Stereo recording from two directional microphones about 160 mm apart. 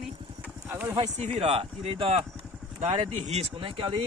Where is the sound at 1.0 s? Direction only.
35° right (ahead or behind).